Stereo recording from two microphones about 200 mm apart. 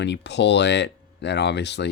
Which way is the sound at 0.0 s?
60° left (ahead or behind).